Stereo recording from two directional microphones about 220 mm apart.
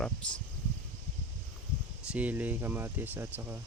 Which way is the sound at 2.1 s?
5° right (ahead or behind).